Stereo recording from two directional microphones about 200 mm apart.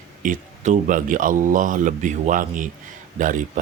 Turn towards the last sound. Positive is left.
turn(degrees=-40)  # may be behind; listen again after turning